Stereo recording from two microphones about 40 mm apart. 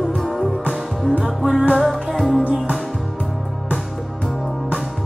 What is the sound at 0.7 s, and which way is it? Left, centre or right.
Music, centre.